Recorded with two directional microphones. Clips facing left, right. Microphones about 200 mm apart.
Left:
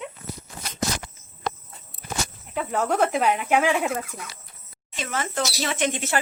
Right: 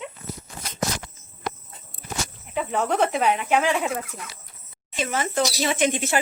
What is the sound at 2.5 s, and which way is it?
Speech, centre (ahead or behind).